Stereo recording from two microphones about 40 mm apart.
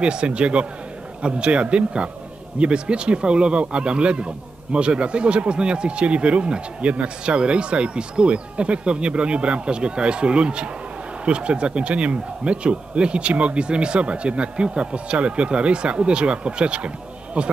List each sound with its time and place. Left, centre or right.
0.0 s speech: right